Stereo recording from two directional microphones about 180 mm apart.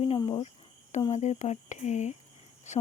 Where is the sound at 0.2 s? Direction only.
25° left (ahead or behind).